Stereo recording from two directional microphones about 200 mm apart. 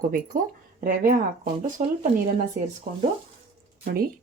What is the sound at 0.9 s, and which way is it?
Speech, 40° right (ahead or behind).